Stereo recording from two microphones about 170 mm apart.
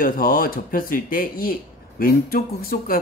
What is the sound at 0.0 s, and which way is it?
Speech, 60° left (ahead or behind).